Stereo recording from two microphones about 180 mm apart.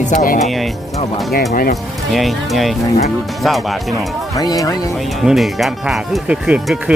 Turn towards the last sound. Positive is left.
turn(degrees=-5)  # may be behind; listen again after turning